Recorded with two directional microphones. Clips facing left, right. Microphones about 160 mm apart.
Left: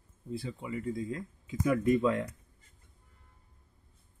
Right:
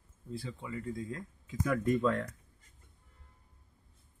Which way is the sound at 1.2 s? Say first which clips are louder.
Left 2 dB; 15° left (ahead or behind).